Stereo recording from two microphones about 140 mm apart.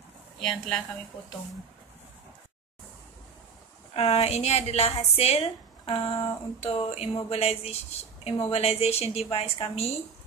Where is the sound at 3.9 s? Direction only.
45° left (ahead or behind).